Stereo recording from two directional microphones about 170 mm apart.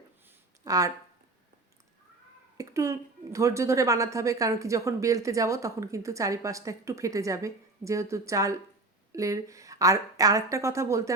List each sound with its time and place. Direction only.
0.6 s speech: 20° right (ahead or behind)
2.6 s a woman's voice: 20° right (ahead or behind)